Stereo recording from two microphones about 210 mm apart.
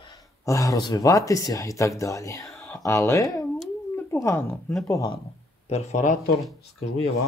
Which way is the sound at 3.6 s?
10° left (ahead or behind).